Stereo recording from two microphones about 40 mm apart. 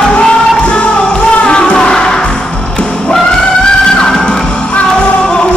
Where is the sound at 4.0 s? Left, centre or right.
Left.